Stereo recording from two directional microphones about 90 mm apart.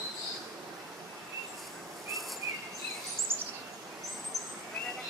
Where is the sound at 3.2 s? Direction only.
25° right (ahead or behind).